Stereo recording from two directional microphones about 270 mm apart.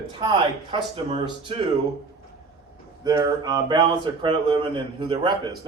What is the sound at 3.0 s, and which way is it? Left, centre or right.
Speech, centre.